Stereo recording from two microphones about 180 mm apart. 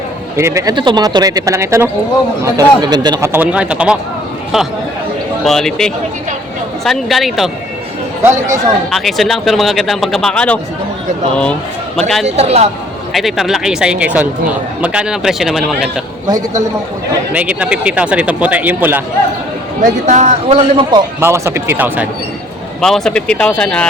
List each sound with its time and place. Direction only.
0.3 s speech: 15° right (ahead or behind)
5.4 s speech: centre (ahead or behind)
8.2 s speech: 15° right (ahead or behind)
8.9 s speech: centre (ahead or behind)
11.9 s speech: centre (ahead or behind)
12.2 s a man's voice: 35° right (ahead or behind)
13.1 s speech: centre (ahead or behind)
16.2 s speech: 20° right (ahead or behind)
17.3 s speech: 5° right (ahead or behind)
20.1 s a man's voice: 40° right (ahead or behind)
21.2 s speech: 15° right (ahead or behind)
22.8 s speech: centre (ahead or behind)